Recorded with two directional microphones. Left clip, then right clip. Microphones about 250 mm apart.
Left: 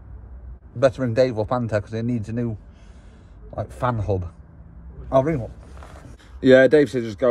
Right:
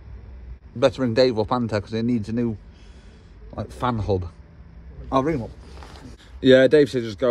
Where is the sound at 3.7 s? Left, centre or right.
Centre.